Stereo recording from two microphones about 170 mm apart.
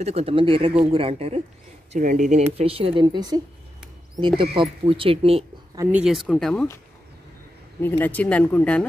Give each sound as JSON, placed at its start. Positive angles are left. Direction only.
{"t": 0.0, "sound": "speech", "side_deg": -35}
{"t": 4.4, "sound": "speech", "side_deg": -30}
{"t": 5.8, "sound": "speech", "side_deg": -10}
{"t": 8.0, "sound": "speech", "side_deg": 10}